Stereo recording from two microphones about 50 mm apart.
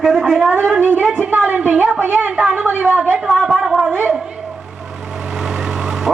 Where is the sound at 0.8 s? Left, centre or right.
Right.